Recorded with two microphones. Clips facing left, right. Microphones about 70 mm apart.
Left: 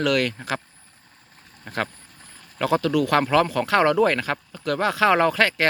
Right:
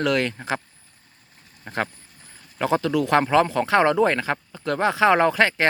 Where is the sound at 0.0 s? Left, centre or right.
Right.